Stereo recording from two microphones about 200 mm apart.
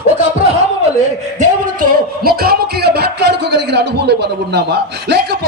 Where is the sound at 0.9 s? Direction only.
40° right (ahead or behind).